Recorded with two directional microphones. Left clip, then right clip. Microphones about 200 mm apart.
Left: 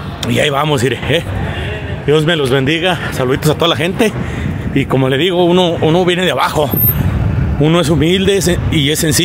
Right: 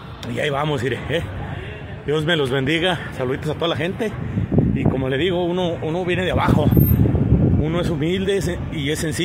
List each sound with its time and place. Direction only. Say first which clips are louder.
0.3 s speech: left 8 dB; 15° left (ahead or behind)
3.3 s speech: left 10 dB; 20° left (ahead or behind)